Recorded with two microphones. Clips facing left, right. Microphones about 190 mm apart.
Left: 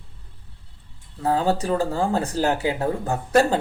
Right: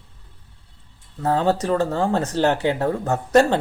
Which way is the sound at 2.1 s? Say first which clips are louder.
Right 2 dB; 40° right (ahead or behind).